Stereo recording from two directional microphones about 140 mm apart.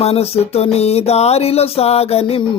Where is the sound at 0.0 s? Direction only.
45° left (ahead or behind).